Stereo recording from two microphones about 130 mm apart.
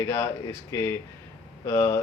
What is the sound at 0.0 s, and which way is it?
Speech, 25° left (ahead or behind).